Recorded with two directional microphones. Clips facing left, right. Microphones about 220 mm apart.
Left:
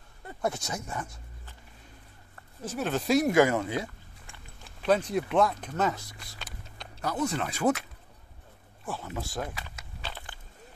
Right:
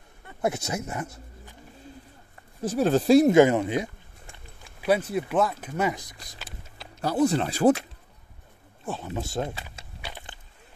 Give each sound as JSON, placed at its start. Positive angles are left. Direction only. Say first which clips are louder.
{"t": 0.4, "sound": "speech", "louder": "right 4 dB", "side_deg": -25}
{"t": 2.6, "sound": "speech", "louder": "right 8 dB", "side_deg": -35}
{"t": 4.8, "sound": "speech", "louder": "right 1 dB", "side_deg": -10}
{"t": 7.0, "sound": "speech", "louder": "right 7 dB", "side_deg": -30}
{"t": 8.8, "sound": "speech", "louder": "right 4 dB", "side_deg": -20}
{"t": 10.0, "sound": "walk", "louder": "right 1 dB", "side_deg": -15}